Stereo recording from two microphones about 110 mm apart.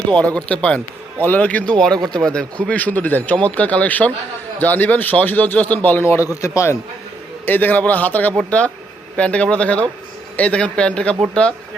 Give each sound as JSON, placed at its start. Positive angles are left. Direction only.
{"t": 0.2, "sound": "a man's voice", "side_deg": 10}
{"t": 7.4, "sound": "speech", "side_deg": 15}